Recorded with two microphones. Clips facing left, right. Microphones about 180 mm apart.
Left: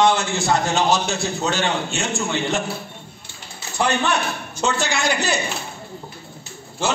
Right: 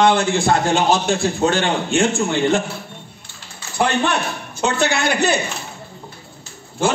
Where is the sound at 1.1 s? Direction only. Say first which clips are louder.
Right 6 dB; 55° right (ahead or behind).